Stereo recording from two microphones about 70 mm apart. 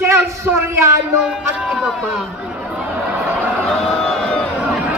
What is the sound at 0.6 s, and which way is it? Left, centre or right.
Speech, right.